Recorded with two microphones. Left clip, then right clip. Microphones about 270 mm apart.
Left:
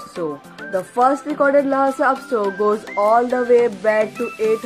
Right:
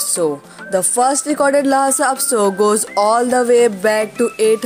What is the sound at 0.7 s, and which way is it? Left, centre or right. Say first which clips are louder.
Speech: right 2 dB; right.